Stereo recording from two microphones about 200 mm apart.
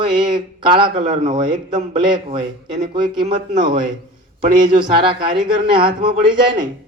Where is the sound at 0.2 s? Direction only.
25° right (ahead or behind).